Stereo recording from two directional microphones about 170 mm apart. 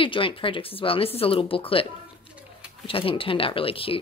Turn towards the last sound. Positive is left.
turn(degrees=35)  # may be behind; listen again after turning